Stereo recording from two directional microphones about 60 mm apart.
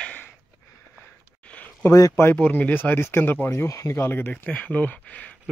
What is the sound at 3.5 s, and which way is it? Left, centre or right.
Speech, left.